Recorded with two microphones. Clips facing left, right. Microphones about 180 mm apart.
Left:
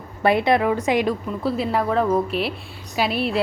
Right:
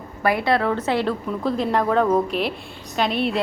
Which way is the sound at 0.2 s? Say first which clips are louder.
Left 2 dB; 25° left (ahead or behind).